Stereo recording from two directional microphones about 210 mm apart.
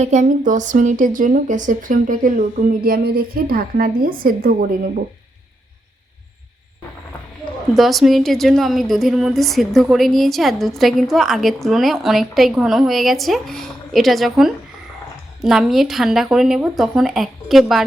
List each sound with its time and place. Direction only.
0.0 s speech: 35° right (ahead or behind)
7.7 s a woman's voice: centre (ahead or behind)